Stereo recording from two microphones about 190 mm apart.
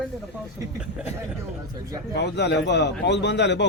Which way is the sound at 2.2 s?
65° left (ahead or behind).